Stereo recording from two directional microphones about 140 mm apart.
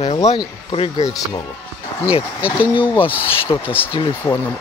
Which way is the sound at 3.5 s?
35° left (ahead or behind).